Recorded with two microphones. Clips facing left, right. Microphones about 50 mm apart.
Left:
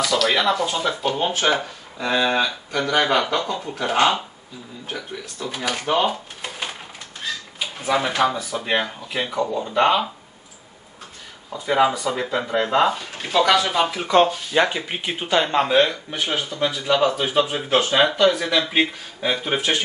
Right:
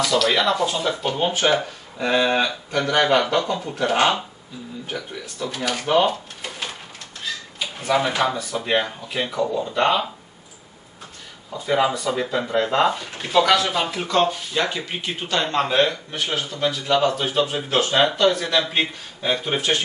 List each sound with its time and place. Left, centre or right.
0.0 s speech: centre
3.9 s speech: centre
4.8 s speech: centre
5.5 s speech: centre
6.0 s a sound: centre
8.2 s speech: centre
11.5 s speech: centre
14.1 s speech: left